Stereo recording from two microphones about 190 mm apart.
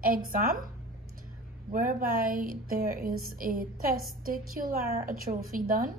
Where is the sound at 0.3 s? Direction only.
45° right (ahead or behind).